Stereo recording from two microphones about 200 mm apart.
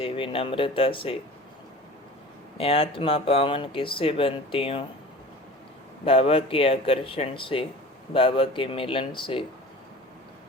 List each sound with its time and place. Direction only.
0.0 s speech: 30° left (ahead or behind)
2.6 s speech: 30° left (ahead or behind)
6.1 s speech: 30° left (ahead or behind)